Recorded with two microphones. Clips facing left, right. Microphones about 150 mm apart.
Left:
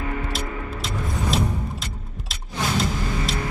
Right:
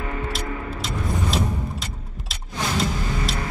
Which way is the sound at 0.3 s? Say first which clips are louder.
Even; centre (ahead or behind).